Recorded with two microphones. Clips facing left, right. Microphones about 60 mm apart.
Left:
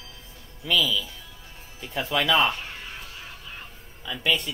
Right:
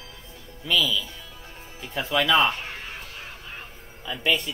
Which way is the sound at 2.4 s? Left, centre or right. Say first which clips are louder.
Right 1 dB; right.